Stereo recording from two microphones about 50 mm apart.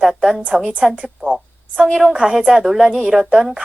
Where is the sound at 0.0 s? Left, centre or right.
Centre.